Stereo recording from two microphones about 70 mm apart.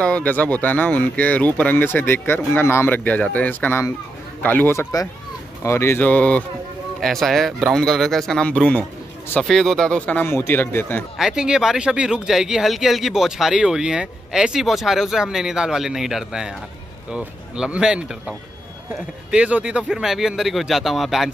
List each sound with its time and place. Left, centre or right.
0.0 s speech: centre; by 3.0 s left
3.0 s speech: left
5.6 s speech: left
5.9 s speech: left
7.0 s speech: centre
8.5 s speech: centre
9.4 s speech: centre
10.2 s speech: left
11.1 s speech: centre
17.7 s speech: centre
19.3 s speech: centre